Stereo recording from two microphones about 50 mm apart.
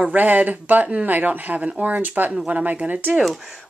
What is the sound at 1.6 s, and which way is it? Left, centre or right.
Speech, right.